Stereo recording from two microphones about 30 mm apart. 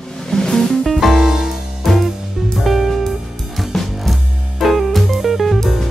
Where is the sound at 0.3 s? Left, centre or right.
Centre.